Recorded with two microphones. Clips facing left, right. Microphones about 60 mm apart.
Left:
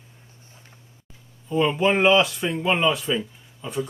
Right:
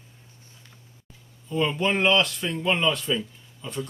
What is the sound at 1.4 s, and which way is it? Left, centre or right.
A man's voice, centre.